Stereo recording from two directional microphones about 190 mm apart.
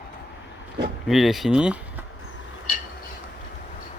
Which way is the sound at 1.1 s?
Centre (ahead or behind).